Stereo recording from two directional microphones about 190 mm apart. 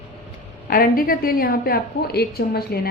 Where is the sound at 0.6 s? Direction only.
50° left (ahead or behind).